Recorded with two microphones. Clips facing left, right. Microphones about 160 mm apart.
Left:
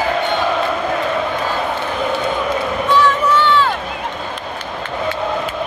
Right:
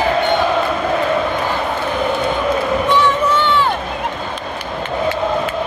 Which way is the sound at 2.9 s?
20° right (ahead or behind).